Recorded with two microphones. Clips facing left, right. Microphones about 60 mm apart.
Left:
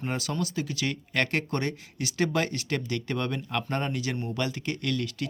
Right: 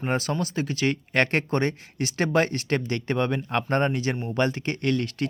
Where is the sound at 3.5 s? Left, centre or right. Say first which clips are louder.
Right 7 dB; right.